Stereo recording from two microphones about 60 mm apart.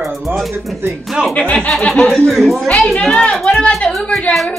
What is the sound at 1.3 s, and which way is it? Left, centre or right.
Speech, left.